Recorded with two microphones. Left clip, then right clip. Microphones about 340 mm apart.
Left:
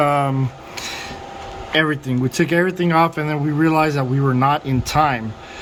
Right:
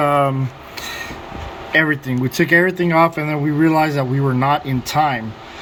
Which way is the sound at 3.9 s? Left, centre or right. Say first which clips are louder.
Even; centre.